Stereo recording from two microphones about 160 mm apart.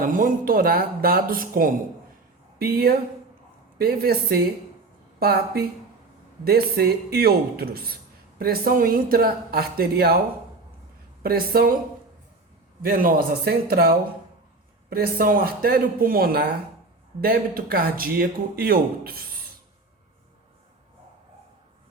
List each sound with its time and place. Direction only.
0.0 s speech: 60° right (ahead or behind); by 10.2 s 75° right (ahead or behind)
11.2 s speech: 70° right (ahead or behind)
12.8 s speech: 65° right (ahead or behind)